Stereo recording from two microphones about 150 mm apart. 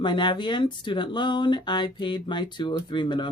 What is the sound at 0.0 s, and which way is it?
Speech, 30° left (ahead or behind).